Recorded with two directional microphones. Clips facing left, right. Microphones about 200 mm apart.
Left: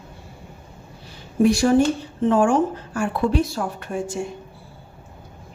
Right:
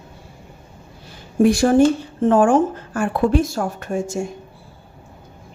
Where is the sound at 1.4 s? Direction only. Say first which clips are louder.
Right 3 dB; 50° right (ahead or behind).